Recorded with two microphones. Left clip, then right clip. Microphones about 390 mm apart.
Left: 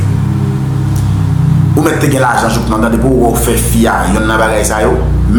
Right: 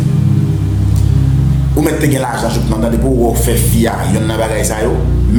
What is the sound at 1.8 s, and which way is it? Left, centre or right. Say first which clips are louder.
Speech: left 3 dB; right.